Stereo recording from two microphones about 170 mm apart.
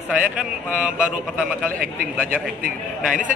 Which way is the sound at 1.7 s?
55° right (ahead or behind).